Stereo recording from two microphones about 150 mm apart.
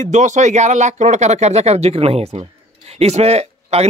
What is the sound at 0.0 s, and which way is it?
Speech, 55° right (ahead or behind).